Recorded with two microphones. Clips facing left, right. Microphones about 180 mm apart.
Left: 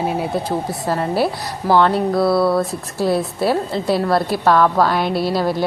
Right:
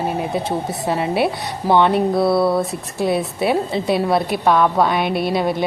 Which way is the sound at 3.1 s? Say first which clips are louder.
Left 1 dB; centre (ahead or behind).